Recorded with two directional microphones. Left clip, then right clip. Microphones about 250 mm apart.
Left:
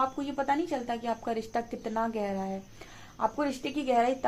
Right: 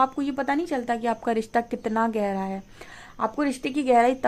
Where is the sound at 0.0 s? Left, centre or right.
Right.